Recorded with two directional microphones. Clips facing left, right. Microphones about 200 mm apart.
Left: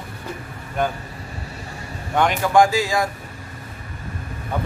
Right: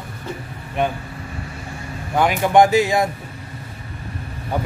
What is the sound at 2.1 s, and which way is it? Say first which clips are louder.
Speech: right 1 dB; 5° right (ahead or behind).